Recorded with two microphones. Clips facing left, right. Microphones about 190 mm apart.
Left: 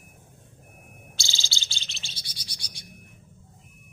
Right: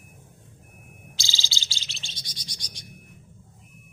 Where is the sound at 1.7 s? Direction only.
90° right.